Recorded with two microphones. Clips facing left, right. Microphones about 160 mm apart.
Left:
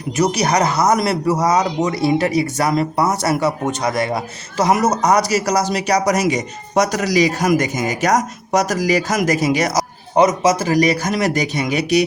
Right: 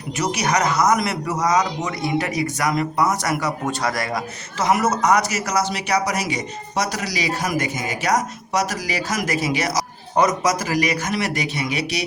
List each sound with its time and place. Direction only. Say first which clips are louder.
0.2 s speech: left 5 dB; 35° left (ahead or behind)
4.5 s speech: left 3 dB; 40° left (ahead or behind)
10.2 s speech: left 5 dB; 25° left (ahead or behind); by 12.0 s 45° left (ahead or behind)